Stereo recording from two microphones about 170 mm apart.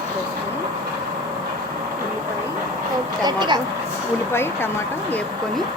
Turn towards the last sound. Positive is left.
turn(degrees=15)  # may be behind; listen again after turning